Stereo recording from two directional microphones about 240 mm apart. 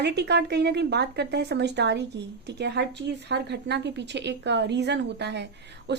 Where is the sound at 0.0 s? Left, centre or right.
Right.